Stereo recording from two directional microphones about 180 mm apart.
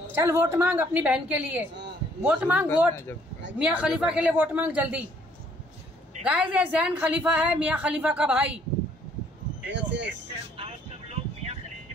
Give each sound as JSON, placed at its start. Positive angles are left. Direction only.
{"t": 0.1, "sound": "a woman's voice", "side_deg": -15}
{"t": 6.2, "sound": "a woman's voice", "side_deg": -5}
{"t": 9.7, "sound": "speech", "side_deg": -75}
{"t": 10.6, "sound": "vehicle", "side_deg": -35}